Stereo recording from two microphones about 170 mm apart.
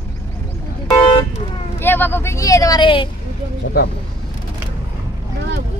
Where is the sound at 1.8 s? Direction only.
10° left (ahead or behind); by 3.1 s 30° left (ahead or behind).